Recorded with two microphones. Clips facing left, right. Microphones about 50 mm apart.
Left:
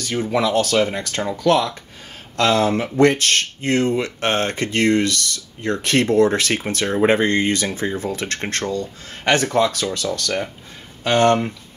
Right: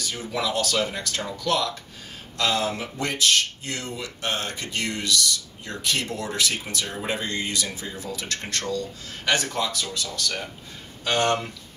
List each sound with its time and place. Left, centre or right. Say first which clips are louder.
0.1 s speech: left 9 dB; left
11.1 s speech: left 7 dB; left